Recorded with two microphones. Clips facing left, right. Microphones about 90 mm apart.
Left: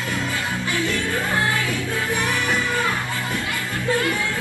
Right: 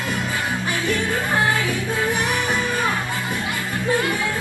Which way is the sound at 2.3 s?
20° right (ahead or behind).